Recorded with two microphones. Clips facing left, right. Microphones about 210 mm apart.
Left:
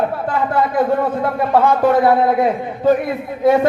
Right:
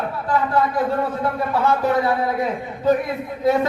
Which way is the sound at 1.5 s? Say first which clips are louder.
Left 6 dB; 50° left (ahead or behind).